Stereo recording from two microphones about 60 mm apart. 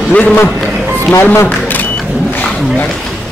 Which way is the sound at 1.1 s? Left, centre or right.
Left.